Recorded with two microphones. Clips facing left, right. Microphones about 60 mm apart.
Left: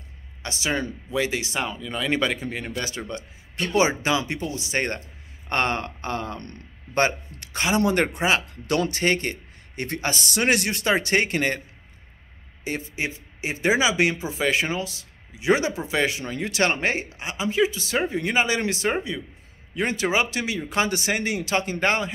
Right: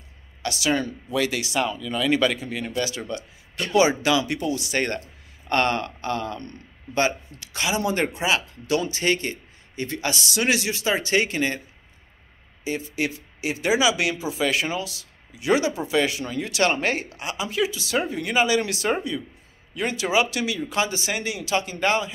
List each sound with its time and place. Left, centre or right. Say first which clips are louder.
0.4 s speech: right 3 dB; left
7.7 s speech: left 3 dB; left
12.6 s speech: right 1 dB; left
12.9 s speech: right 3 dB; left
19.7 s speech: even; left